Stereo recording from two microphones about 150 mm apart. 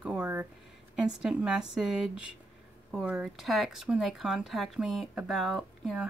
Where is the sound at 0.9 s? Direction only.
5° right (ahead or behind).